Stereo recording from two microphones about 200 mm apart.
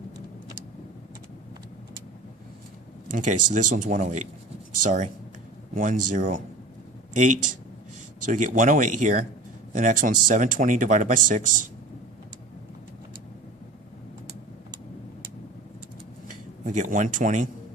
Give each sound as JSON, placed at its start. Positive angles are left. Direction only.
{"t": 3.1, "sound": "speech", "side_deg": -40}
{"t": 16.3, "sound": "speech", "side_deg": -40}